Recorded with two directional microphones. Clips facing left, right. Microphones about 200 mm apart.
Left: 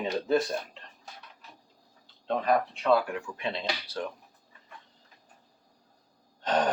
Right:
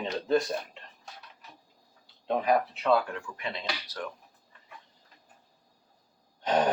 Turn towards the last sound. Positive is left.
turn(degrees=-10)  # may be behind; listen again after turning